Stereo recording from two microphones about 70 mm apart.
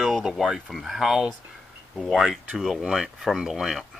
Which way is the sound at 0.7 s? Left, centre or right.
Centre.